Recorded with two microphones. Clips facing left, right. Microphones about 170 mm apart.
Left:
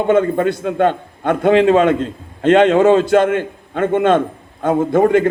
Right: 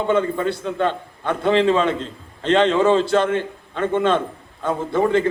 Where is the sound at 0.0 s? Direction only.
50° left (ahead or behind).